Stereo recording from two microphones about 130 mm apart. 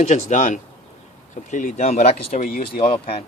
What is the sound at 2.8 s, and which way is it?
Speech, 50° left (ahead or behind).